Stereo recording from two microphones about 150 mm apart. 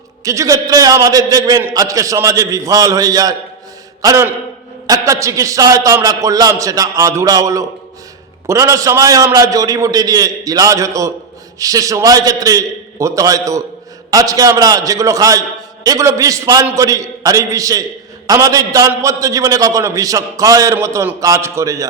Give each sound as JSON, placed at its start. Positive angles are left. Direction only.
{"t": 0.3, "sound": "a man's voice", "side_deg": -20}